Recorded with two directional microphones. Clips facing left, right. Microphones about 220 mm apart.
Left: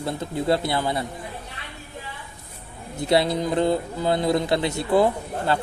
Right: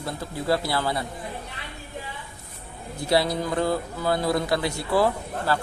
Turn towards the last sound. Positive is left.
turn(degrees=20)  # may be behind; listen again after turning